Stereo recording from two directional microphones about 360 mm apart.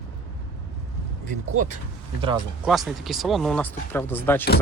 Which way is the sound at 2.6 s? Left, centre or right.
Centre.